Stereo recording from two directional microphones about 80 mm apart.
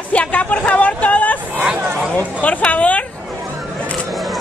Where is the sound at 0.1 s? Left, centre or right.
Centre.